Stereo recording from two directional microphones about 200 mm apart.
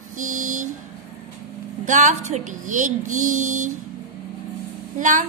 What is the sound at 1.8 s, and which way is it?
A woman's voice, 40° right (ahead or behind).